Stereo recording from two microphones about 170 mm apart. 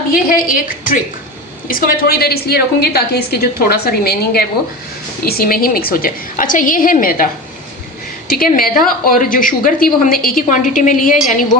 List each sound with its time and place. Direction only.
0.1 s a woman's voice: 55° left (ahead or behind)
8.3 s a woman's voice: 60° left (ahead or behind)